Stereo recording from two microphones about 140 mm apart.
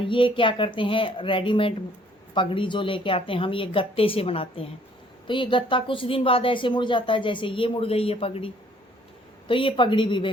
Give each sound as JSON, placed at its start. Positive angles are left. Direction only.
{"t": 0.0, "sound": "speech", "side_deg": 35}